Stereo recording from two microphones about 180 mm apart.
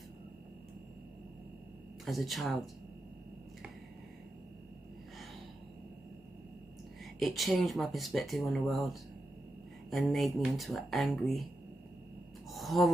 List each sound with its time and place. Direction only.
2.0 s speech: centre (ahead or behind)
7.2 s speech: centre (ahead or behind)
12.4 s a sound: centre (ahead or behind)